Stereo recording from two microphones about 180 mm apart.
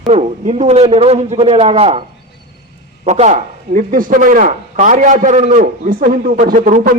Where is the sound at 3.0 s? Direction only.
40° right (ahead or behind).